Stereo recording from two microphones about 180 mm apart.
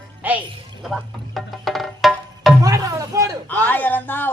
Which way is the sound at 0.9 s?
Centre (ahead or behind).